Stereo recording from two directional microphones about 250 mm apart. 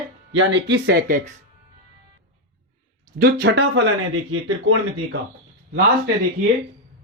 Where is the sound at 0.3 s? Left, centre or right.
Right.